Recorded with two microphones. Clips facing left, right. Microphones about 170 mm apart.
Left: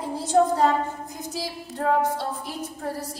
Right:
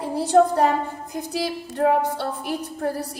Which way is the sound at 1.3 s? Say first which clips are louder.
Right 7 dB; 70° right (ahead or behind).